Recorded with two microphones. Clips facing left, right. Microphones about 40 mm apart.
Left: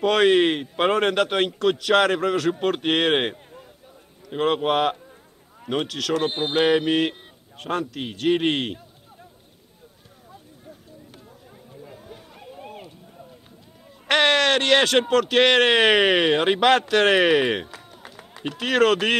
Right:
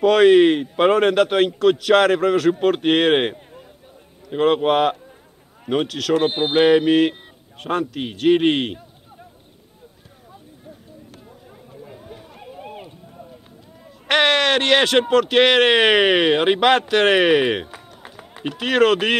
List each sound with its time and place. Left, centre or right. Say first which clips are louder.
0.0 s speech: right 5 dB; centre
6.1 s speech: right 5 dB; right
6.6 s speech: right 5 dB; centre
11.7 s a sound: right 3 dB; centre
14.0 s speech: right 2 dB; centre
17.6 s run: right 2 dB; centre
18.4 s speech: right 3 dB; centre